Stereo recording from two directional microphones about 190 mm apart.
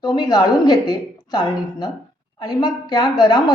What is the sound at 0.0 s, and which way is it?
A woman's voice, 20° left (ahead or behind).